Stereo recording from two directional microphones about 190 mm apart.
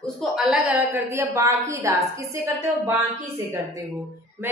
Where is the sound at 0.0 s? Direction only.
Centre (ahead or behind).